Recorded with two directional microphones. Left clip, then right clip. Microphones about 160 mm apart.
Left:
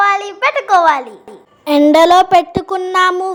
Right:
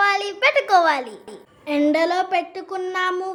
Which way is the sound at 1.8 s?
45° left (ahead or behind).